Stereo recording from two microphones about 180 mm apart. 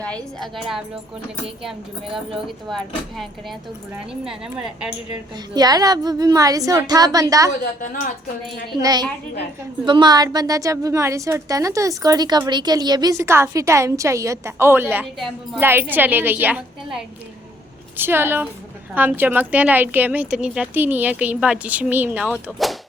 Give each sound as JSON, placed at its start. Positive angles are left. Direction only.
{"t": 0.0, "sound": "speech", "side_deg": 5}
{"t": 2.6, "sound": "speech", "side_deg": 0}
{"t": 5.5, "sound": "a woman's voice", "side_deg": -20}
{"t": 7.6, "sound": "a woman's voice", "side_deg": 50}
{"t": 8.8, "sound": "a woman's voice", "side_deg": -20}